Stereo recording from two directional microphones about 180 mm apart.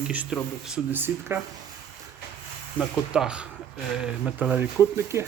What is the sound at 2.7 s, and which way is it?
Speech, 5° right (ahead or behind).